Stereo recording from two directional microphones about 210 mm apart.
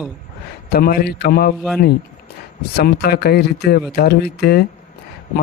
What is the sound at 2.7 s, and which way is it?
Speech, 50° left (ahead or behind).